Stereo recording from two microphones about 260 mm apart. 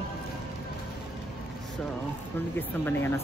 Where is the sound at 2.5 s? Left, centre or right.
Centre.